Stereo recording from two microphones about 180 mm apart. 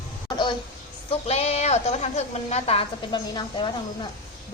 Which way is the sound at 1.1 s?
35° left (ahead or behind).